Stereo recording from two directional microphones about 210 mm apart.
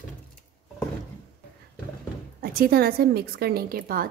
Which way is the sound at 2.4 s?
45° right (ahead or behind).